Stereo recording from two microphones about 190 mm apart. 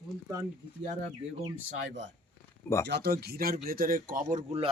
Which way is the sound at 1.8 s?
70° right (ahead or behind).